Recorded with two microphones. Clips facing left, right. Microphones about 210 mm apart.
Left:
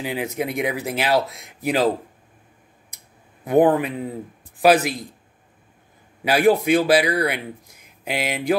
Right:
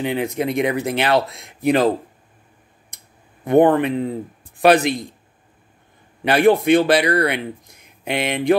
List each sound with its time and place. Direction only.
0.0 s speech: 5° left (ahead or behind)
3.4 s speech: 5° left (ahead or behind)
6.2 s speech: 5° left (ahead or behind)